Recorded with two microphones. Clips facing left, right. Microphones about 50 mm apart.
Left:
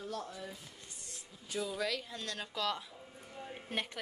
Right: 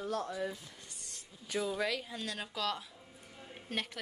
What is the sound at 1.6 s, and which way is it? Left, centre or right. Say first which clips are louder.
Speech: right 2 dB; centre.